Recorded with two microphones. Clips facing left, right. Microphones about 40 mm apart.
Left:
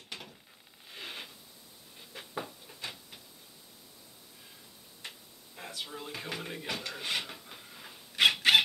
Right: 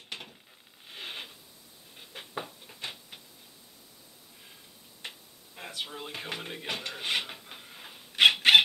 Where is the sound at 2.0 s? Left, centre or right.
Right.